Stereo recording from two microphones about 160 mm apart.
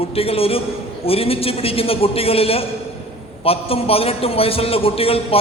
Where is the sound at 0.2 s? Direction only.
35° left (ahead or behind).